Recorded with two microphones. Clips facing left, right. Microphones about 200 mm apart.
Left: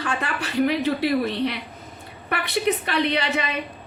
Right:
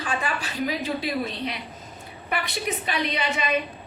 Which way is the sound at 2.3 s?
60° left (ahead or behind).